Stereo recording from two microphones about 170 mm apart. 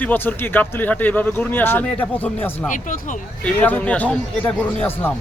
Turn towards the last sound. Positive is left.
turn(degrees=10)  # may be behind; listen again after turning